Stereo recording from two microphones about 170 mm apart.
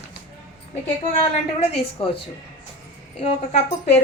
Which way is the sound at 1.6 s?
30° left (ahead or behind).